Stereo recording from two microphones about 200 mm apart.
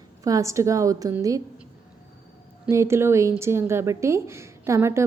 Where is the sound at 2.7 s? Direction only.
15° right (ahead or behind).